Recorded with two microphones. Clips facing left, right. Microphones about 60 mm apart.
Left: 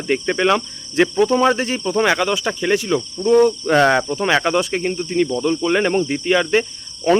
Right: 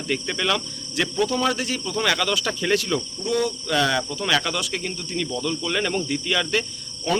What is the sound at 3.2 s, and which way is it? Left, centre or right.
Speech, left.